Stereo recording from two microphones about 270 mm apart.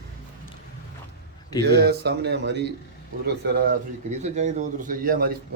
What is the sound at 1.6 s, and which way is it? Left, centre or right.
A man's voice, right.